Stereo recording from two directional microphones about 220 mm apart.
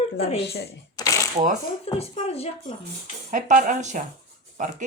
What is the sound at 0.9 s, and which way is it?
Shuffling cards, 15° left (ahead or behind).